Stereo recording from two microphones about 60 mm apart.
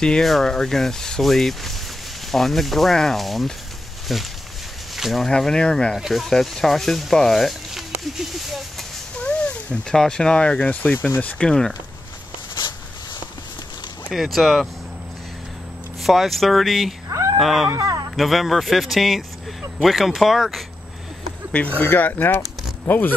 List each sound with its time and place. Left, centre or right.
0.2 s rub: centre
4.9 s a sound: centre
5.2 s speech: centre
5.9 s rub: centre
6.2 s rub: centre
9.2 s speech: centre
10.6 s speech: left
14.1 s rub: centre
16.0 s rub: centre
17.1 s a sound: right
17.4 s rub: centre
17.7 s speech: right
18.1 s rub: centre
21.8 s speech: left